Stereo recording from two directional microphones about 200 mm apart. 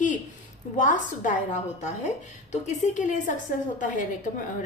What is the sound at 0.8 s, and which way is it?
Speech, 40° left (ahead or behind).